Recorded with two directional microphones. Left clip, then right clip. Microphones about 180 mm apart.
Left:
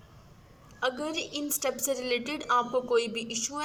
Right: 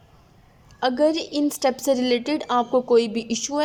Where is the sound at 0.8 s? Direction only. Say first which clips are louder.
Right 10 dB; 30° right (ahead or behind).